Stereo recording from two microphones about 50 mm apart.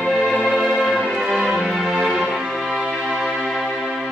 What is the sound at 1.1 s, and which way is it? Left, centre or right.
Music, centre.